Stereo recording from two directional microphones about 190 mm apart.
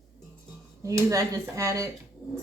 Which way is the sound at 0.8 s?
15° right (ahead or behind).